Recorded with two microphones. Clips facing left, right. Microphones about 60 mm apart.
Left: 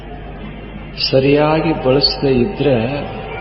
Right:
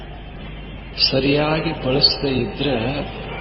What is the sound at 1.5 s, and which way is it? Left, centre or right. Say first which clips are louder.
A man's voice: left 7 dB; left.